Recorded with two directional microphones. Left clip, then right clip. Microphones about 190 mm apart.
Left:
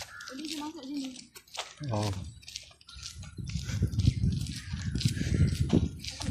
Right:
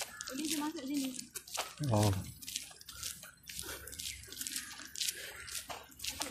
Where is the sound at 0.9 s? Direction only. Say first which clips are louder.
Even; 25° left (ahead or behind).